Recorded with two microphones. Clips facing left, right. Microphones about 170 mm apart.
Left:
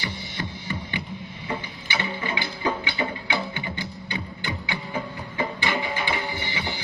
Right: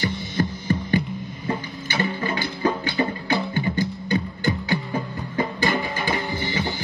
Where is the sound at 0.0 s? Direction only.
45° right (ahead or behind).